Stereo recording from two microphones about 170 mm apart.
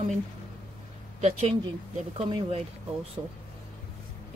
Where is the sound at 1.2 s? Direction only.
40° right (ahead or behind).